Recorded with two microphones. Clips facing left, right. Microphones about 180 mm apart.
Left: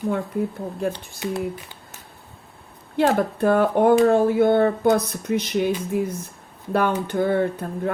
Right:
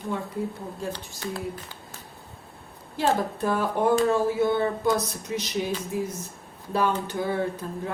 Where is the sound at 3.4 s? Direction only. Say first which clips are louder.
Left 8 dB; 60° left (ahead or behind).